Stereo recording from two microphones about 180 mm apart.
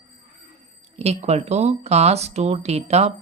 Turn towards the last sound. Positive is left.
turn(degrees=-35)  # may be behind; listen again after turning